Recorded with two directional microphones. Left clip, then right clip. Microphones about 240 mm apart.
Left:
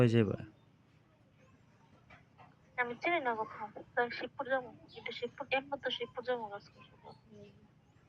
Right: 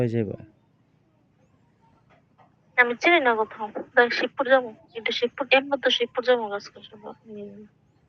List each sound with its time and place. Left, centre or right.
0.0 s speech: centre
2.7 s a woman's voice: right